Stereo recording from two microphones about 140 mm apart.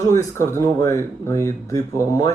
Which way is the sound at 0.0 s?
20° left (ahead or behind).